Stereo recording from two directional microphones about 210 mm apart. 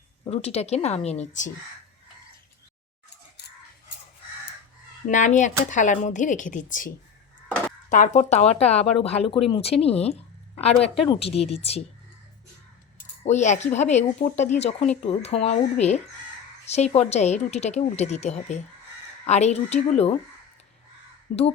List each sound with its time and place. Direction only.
0.3 s speech: 30° left (ahead or behind)
5.0 s speech: 35° left (ahead or behind)
9.2 s speech: centre (ahead or behind)
9.5 s speech: 30° left (ahead or behind)
13.2 s speech: 35° left (ahead or behind)
21.3 s speech: 30° left (ahead or behind)